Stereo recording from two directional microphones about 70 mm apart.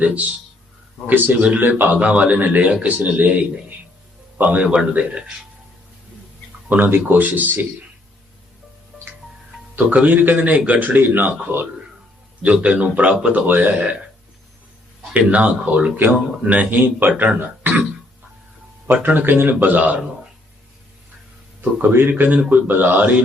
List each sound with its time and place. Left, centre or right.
0.0 s a man's voice: centre
4.4 s a man's voice: right
6.7 s a man's voice: right
9.7 s a man's voice: right
15.3 s a man's voice: right
18.9 s a man's voice: right
21.6 s a man's voice: right